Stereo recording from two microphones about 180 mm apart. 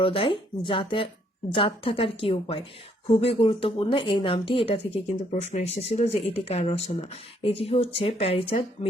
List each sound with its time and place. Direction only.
0.0 s speech: 30° left (ahead or behind)